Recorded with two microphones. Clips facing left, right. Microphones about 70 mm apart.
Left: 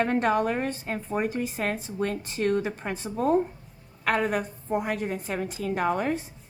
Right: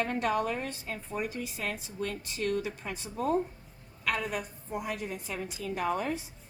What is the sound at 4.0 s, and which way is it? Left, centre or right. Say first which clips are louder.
Speech: left 7 dB; left.